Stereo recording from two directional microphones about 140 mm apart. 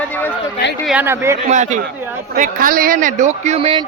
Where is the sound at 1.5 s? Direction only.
60° right (ahead or behind).